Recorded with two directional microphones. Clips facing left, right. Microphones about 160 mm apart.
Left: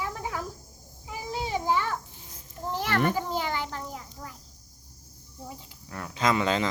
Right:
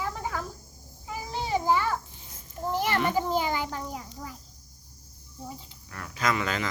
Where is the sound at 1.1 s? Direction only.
5° left (ahead or behind); by 3.0 s 15° right (ahead or behind).